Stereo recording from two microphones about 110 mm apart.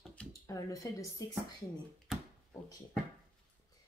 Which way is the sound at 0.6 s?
30° left (ahead or behind).